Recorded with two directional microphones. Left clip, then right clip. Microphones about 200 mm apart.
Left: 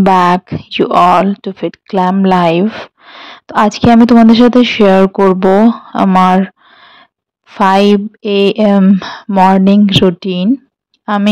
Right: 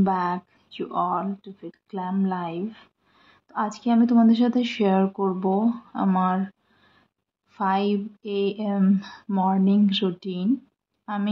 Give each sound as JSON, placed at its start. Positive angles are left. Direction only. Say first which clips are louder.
{"t": 0.0, "sound": "a woman's voice", "louder": "left 16 dB", "side_deg": 50}